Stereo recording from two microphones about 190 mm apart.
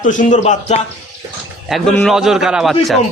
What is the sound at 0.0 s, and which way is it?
Speech, 40° left (ahead or behind).